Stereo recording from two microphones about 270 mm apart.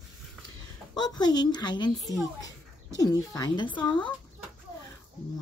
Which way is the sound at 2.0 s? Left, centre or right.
Centre.